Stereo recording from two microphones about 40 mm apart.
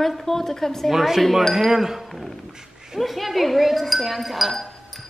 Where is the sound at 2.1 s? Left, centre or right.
Centre.